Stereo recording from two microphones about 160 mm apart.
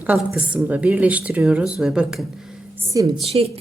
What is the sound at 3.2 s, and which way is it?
Speech, 40° right (ahead or behind).